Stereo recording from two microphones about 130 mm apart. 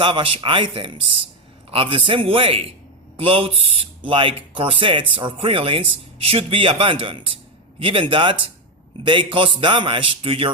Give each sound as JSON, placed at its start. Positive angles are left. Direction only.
{"t": 0.0, "sound": "a man's voice", "side_deg": -40}